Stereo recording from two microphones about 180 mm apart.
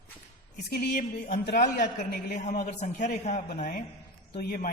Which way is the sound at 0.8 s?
55° left (ahead or behind).